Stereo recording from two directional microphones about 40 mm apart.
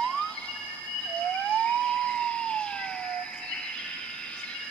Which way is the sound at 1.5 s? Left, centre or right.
Left.